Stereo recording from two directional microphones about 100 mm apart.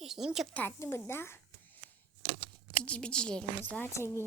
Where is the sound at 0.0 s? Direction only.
5° right (ahead or behind).